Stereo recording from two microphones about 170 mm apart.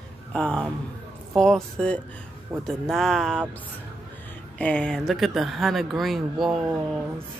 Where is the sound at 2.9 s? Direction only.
Centre (ahead or behind).